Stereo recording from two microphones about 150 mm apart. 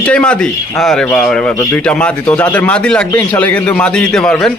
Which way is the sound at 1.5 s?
20° left (ahead or behind).